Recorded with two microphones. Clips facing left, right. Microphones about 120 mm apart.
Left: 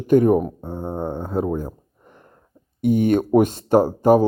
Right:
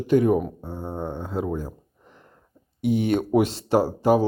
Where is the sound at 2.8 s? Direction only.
50° left (ahead or behind).